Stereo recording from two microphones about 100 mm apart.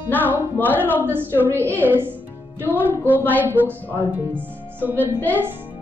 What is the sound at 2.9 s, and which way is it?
Speech, 20° left (ahead or behind).